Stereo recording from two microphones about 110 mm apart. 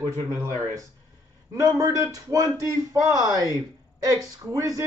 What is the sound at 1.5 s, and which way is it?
Speech, 35° right (ahead or behind).